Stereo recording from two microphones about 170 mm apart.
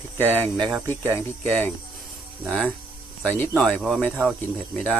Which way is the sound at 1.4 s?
10° left (ahead or behind).